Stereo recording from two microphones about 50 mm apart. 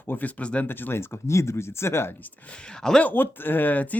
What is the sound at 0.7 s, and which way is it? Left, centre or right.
Speech, left.